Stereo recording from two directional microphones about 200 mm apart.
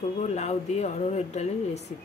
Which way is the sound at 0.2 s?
35° left (ahead or behind).